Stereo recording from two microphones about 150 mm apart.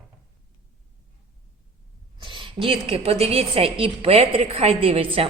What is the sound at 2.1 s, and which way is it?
A woman's voice, 35° right (ahead or behind).